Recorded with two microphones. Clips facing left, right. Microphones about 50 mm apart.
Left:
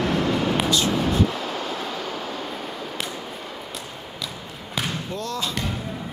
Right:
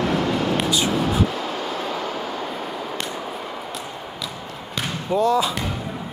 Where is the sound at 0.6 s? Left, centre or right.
Centre.